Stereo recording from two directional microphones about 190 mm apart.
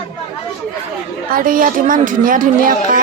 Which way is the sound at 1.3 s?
45° right (ahead or behind).